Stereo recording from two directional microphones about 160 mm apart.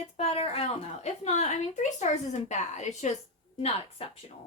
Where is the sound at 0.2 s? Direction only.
40° left (ahead or behind).